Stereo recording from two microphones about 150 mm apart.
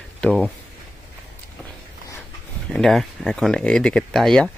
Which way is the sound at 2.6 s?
5° left (ahead or behind).